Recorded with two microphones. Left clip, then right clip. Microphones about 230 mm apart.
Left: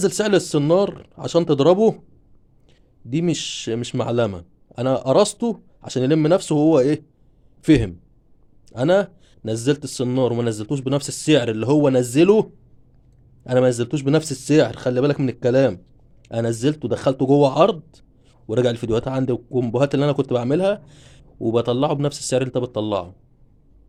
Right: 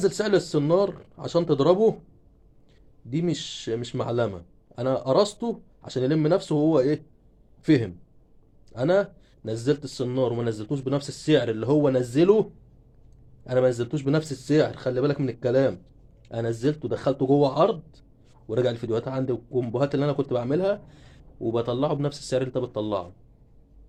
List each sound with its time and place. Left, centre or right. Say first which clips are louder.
0.0 s a man's voice: left 4 dB; left
3.1 s a man's voice: left 6 dB; left